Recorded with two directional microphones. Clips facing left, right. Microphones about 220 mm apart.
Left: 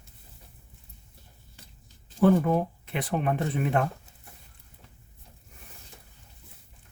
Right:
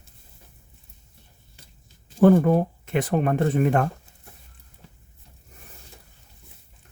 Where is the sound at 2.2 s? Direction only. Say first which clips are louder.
Right 5 dB; 45° right (ahead or behind).